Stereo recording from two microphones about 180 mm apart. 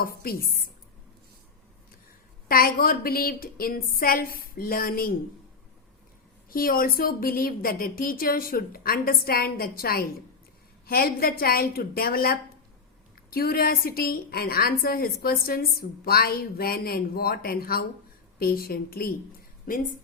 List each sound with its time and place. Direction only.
0.0 s speech: 55° left (ahead or behind)
2.5 s a woman's voice: 55° left (ahead or behind)
6.5 s a woman's voice: 55° left (ahead or behind)